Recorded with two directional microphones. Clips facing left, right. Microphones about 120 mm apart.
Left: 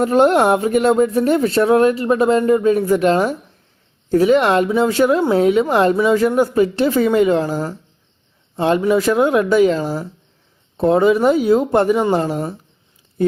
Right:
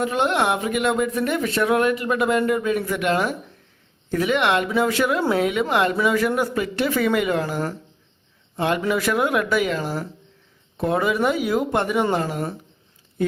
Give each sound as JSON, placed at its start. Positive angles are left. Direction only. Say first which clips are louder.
{"t": 0.0, "sound": "a woman's voice", "louder": "left 8 dB", "side_deg": 40}
{"t": 9.8, "sound": "speech", "louder": "left 4 dB", "side_deg": 10}
{"t": 10.8, "sound": "speech", "louder": "left 7 dB", "side_deg": 30}